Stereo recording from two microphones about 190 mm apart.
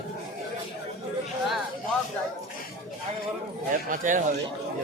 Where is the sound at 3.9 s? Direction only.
45° right (ahead or behind).